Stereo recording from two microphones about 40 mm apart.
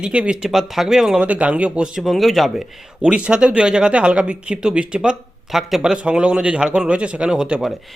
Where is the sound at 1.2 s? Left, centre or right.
Right.